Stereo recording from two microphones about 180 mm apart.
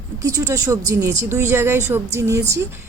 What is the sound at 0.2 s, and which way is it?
A woman's voice, 20° right (ahead or behind).